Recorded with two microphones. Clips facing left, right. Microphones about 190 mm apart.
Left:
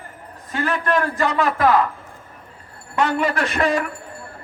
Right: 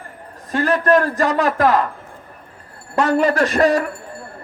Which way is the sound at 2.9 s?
40° right (ahead or behind).